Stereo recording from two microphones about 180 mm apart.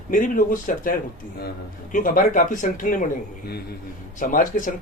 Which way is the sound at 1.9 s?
50° left (ahead or behind).